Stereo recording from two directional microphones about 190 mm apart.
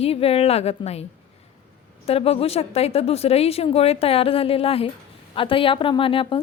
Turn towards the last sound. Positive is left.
turn(degrees=30)  # may be behind; listen again after turning